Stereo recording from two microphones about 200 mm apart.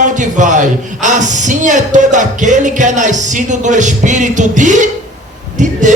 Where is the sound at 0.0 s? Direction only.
40° right (ahead or behind).